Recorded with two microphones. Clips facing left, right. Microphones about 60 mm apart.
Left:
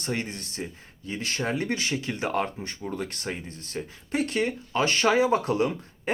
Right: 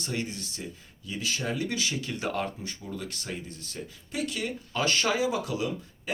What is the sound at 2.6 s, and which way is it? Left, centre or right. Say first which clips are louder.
Speech: left 5 dB; left.